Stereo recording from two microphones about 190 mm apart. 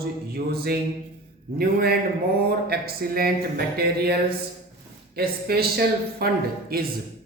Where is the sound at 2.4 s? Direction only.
55° right (ahead or behind).